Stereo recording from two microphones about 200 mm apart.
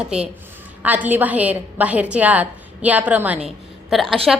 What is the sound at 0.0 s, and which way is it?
A woman's voice, 5° right (ahead or behind).